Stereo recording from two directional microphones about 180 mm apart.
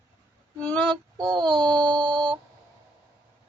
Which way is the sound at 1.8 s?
20° right (ahead or behind).